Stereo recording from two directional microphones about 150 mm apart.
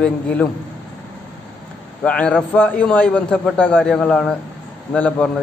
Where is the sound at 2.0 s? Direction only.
5° left (ahead or behind).